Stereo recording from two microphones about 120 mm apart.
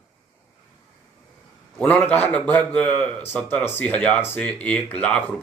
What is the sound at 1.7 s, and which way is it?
Speech, 15° left (ahead or behind).